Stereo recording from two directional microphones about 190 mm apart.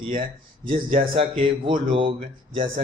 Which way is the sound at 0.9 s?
30° right (ahead or behind).